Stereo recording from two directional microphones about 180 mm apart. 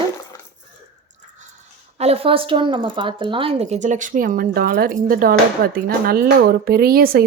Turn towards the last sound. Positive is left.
turn(degrees=-55)  # may be behind; listen again after turning